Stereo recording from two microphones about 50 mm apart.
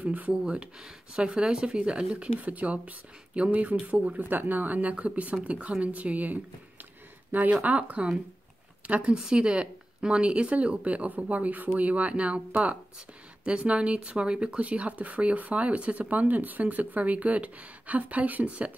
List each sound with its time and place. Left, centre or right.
0.0 s speech: right
0.8 s speech: centre
4.2 s a woman's voice: right
9.1 s speech: centre